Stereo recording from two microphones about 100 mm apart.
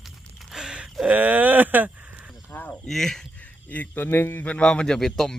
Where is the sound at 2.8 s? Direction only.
5° left (ahead or behind).